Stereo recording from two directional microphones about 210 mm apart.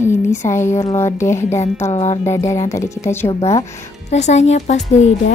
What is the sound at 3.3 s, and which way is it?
Speech, 30° left (ahead or behind).